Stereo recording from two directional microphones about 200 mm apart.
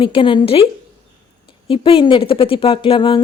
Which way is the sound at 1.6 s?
25° left (ahead or behind).